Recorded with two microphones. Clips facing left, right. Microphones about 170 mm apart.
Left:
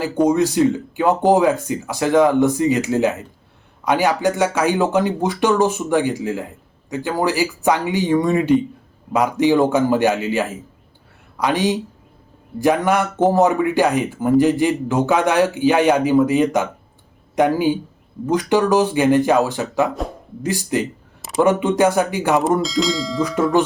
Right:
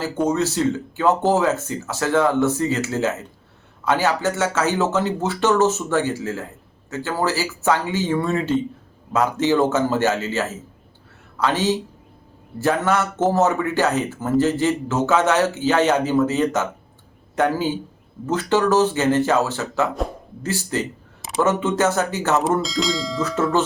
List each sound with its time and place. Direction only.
0.3 s speech: 15° left (ahead or behind)
22.6 s speech: centre (ahead or behind)
23.2 s speech: 15° left (ahead or behind)